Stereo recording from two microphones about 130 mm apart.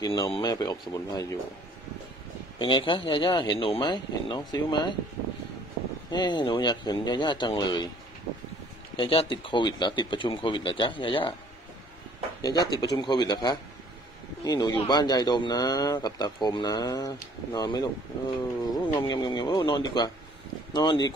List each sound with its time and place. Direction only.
0.0 s a man's voice: 30° left (ahead or behind)
2.6 s a man's voice: 40° left (ahead or behind)
6.0 s a man's voice: 35° left (ahead or behind)
8.9 s a man's voice: 45° left (ahead or behind)
12.4 s a man's voice: 30° left (ahead or behind)